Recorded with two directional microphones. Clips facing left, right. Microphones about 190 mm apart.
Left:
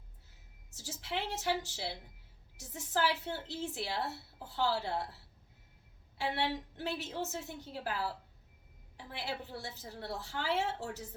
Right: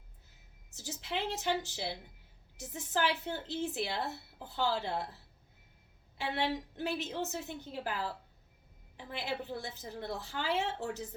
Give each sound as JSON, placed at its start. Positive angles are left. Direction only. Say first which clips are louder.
{"t": 0.7, "sound": "a woman's voice", "louder": "right 1 dB", "side_deg": -15}